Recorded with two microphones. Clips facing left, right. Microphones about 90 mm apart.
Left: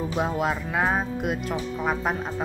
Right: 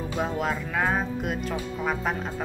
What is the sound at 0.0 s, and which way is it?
Music, 15° left (ahead or behind).